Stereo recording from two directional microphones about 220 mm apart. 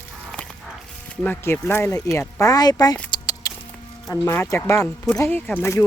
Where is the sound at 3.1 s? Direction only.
20° left (ahead or behind).